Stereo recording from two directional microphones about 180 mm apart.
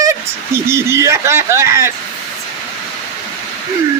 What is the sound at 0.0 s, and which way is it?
Speech, 15° right (ahead or behind).